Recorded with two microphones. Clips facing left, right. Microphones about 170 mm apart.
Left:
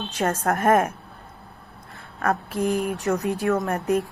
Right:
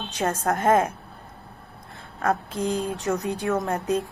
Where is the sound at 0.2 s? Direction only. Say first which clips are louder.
Left 1 dB; 20° right (ahead or behind).